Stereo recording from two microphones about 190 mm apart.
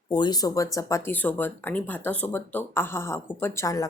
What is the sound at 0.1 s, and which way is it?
Speech, 20° left (ahead or behind).